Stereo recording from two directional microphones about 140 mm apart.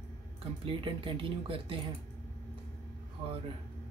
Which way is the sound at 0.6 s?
35° right (ahead or behind).